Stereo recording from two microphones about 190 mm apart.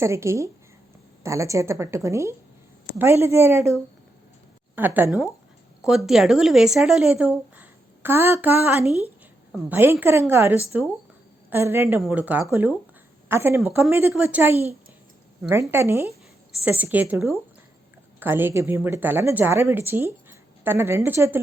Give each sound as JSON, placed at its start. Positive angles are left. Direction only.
{"t": 0.0, "sound": "speech", "side_deg": -15}
{"t": 4.7, "sound": "a woman's voice", "side_deg": -10}